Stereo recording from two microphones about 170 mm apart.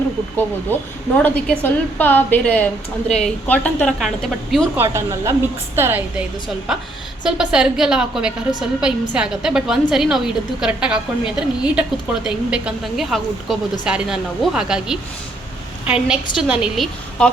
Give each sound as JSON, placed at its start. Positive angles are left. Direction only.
{"t": 0.7, "sound": "a woman's voice", "side_deg": 10}
{"t": 4.8, "sound": "a woman's voice", "side_deg": -15}